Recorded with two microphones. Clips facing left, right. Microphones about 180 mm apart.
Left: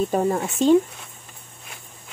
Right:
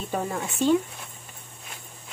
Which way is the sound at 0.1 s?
40° left (ahead or behind).